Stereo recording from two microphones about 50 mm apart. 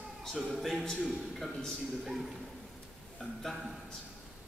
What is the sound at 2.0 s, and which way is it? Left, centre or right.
Speech, centre.